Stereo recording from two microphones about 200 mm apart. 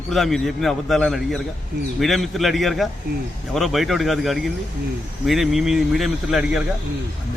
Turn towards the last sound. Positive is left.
turn(degrees=-5)  # may be behind; listen again after turning